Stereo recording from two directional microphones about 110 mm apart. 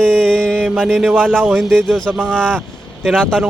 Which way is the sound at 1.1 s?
15° right (ahead or behind).